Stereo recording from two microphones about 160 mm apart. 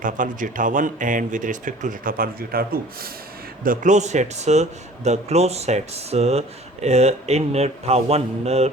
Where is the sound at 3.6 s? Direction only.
55° right (ahead or behind).